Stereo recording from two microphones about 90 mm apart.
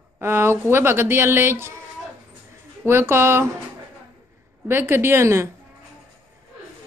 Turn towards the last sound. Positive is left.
turn(degrees=-30)  # may be behind; listen again after turning